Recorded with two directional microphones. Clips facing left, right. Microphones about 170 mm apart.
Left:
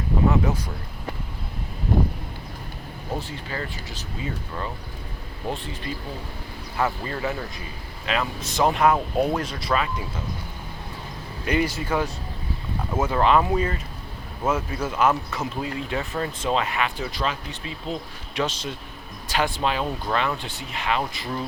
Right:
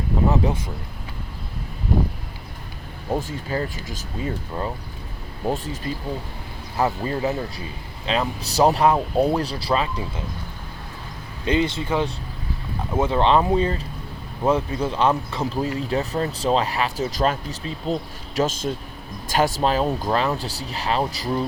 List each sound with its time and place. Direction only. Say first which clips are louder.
0.3 s a sound: even; 30° right (ahead or behind)
3.2 s speech: right 7 dB; 45° right (ahead or behind)
5.5 s speech: right 5 dB; 40° right (ahead or behind)
6.7 s speech: right 4 dB; 20° right (ahead or behind)
11.4 s speech: right 2 dB; 25° right (ahead or behind)